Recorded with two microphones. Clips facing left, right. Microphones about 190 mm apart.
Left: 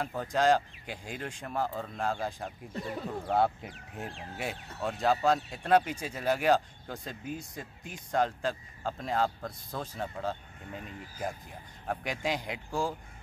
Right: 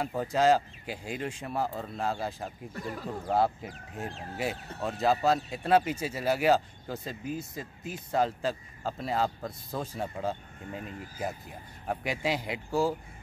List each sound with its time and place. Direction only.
0.0 s speech: 5° right (ahead or behind)
11.9 s speech: 5° right (ahead or behind)